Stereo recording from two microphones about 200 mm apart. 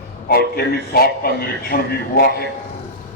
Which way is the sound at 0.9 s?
50° left (ahead or behind).